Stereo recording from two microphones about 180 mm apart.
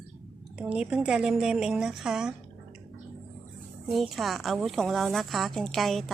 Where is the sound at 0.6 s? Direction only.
5° right (ahead or behind).